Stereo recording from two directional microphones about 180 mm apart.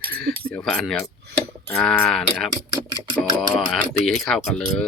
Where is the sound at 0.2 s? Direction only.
60° right (ahead or behind).